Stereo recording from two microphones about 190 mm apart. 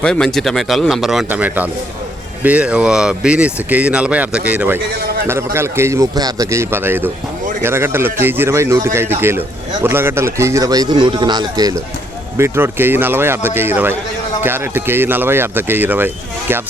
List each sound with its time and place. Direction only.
0.0 s a man's voice: 5° left (ahead or behind)